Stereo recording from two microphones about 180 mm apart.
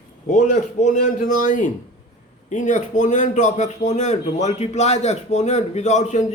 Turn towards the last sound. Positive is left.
turn(degrees=40)  # may be behind; listen again after turning